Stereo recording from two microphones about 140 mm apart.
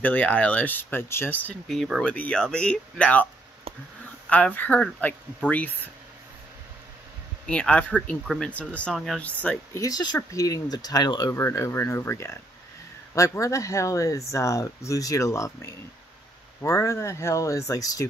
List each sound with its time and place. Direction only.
0.0 s speech: 10° left (ahead or behind)
4.3 s speech: 10° left (ahead or behind)
7.4 s speech: 5° left (ahead or behind)
9.8 s speech: 25° left (ahead or behind)